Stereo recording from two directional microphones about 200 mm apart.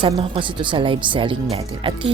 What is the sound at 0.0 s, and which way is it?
Speech, 25° right (ahead or behind).